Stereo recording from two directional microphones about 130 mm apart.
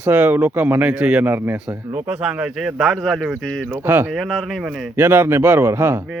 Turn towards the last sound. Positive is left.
turn(degrees=-15)  # may be behind; listen again after turning